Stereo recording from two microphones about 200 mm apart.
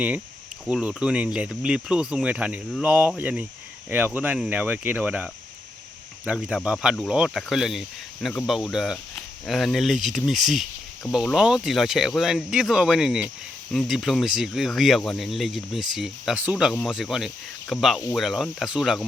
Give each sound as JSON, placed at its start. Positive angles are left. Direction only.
{"t": 0.6, "sound": "speech", "side_deg": -5}